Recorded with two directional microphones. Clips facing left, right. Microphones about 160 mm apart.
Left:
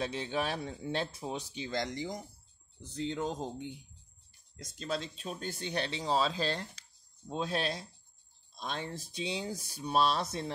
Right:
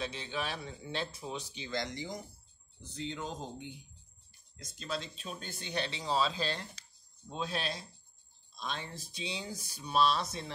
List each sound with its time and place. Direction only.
0.0 s speech: 45° left (ahead or behind)
4.7 s speech: 45° left (ahead or behind)